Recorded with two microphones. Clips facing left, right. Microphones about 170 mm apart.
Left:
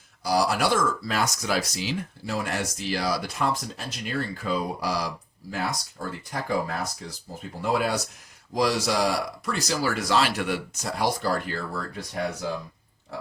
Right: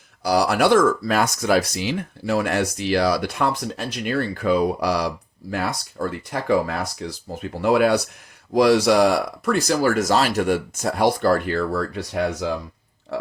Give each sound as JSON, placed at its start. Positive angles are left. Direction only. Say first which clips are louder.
{"t": 0.2, "sound": "speech", "louder": "right 5 dB", "side_deg": -65}